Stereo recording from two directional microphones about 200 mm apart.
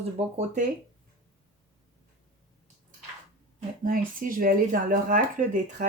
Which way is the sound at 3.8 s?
45° right (ahead or behind).